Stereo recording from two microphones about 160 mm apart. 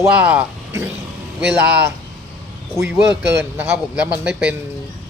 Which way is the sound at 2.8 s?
15° right (ahead or behind).